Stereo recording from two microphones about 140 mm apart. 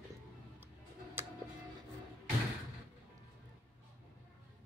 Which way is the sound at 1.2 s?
15° right (ahead or behind).